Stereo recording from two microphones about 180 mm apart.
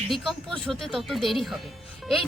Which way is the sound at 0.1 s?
Centre (ahead or behind).